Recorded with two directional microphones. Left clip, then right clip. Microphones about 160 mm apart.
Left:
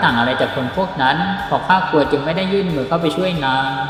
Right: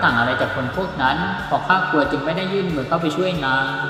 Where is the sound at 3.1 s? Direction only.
25° left (ahead or behind).